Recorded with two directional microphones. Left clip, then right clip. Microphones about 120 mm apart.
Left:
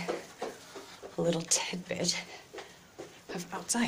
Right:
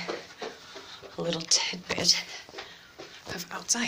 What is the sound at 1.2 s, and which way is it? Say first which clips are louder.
Speech: right 4 dB; 40° left (ahead or behind).